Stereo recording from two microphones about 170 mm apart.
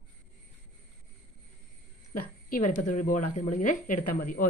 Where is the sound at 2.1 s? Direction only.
50° left (ahead or behind).